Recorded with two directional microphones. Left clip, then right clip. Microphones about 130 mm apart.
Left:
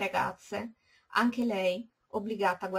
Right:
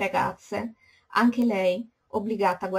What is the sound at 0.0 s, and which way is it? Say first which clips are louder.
A woman's voice: right 5 dB; 5° left (ahead or behind).